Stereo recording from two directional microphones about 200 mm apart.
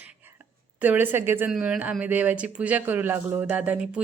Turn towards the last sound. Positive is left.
turn(degrees=-5)  # may be behind; listen again after turning